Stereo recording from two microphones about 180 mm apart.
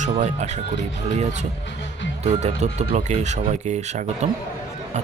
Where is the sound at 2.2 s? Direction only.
40° right (ahead or behind).